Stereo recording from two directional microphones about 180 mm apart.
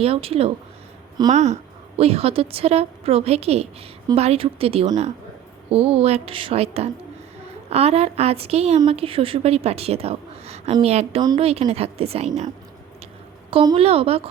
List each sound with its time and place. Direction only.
0.0 s a woman's voice: 30° right (ahead or behind)
13.5 s a woman's voice: 30° right (ahead or behind)